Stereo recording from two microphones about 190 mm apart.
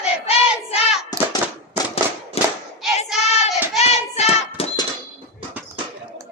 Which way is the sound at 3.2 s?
35° left (ahead or behind).